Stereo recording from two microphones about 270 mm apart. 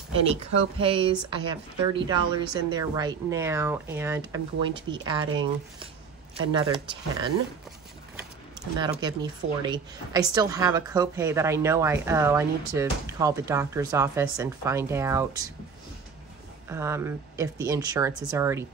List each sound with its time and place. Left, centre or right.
0.7 s speech: centre
8.7 s speech: centre
16.6 s speech: centre